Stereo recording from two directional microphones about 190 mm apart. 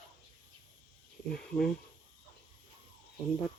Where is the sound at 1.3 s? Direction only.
5° left (ahead or behind).